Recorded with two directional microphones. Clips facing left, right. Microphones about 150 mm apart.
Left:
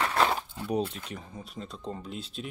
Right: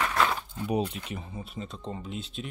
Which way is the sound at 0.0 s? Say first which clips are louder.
Left 1 dB; 30° left (ahead or behind).